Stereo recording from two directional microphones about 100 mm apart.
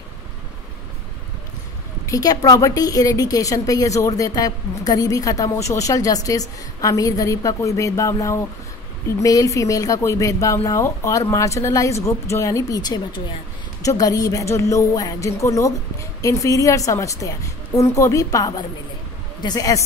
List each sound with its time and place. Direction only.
2.0 s a woman's voice: 35° left (ahead or behind)
13.8 s a woman's voice: 35° left (ahead or behind)